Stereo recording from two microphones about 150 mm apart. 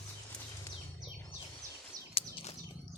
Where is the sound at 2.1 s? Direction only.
40° left (ahead or behind).